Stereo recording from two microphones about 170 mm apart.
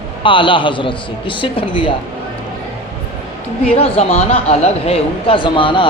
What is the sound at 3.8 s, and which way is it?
A man's voice, 35° left (ahead or behind).